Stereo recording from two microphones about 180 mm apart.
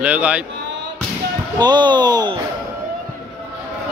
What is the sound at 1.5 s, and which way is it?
Speech, 25° right (ahead or behind).